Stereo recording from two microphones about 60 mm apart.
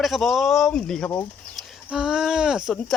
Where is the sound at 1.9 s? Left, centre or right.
Centre.